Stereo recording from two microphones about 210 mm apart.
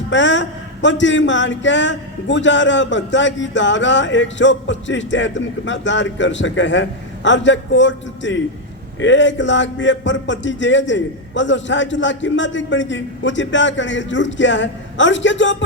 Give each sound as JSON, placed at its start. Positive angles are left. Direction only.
{"t": 0.1, "sound": "a man's voice", "side_deg": 60}